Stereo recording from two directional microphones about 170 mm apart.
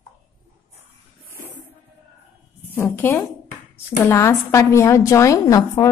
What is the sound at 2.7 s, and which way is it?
A woman's voice, 15° left (ahead or behind).